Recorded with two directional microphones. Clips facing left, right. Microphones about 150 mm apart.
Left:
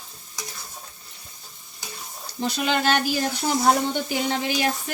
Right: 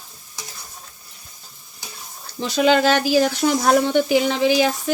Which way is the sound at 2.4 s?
90° right.